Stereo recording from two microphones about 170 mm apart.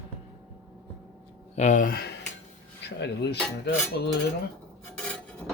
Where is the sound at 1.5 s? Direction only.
45° left (ahead or behind).